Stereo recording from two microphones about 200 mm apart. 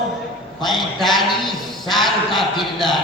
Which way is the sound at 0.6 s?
Centre (ahead or behind).